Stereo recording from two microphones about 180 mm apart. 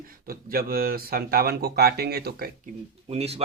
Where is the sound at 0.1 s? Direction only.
55° right (ahead or behind).